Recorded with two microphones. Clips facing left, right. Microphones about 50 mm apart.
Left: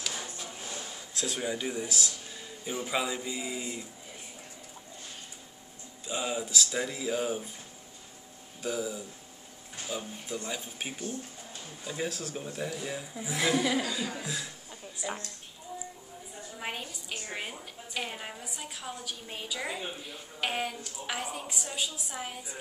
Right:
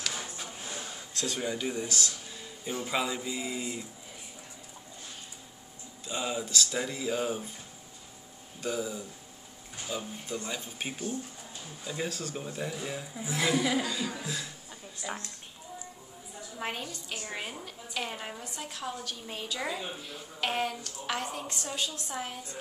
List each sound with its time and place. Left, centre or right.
0.0 s a sound: centre
0.4 s a sound: centre
1.1 s a woman's voice: centre
6.0 s speech: centre
8.6 s a woman's voice: centre
17.3 s a woman's voice: centre